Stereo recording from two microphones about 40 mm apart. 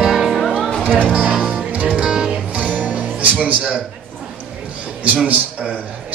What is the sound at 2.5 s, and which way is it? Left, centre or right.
Music, right.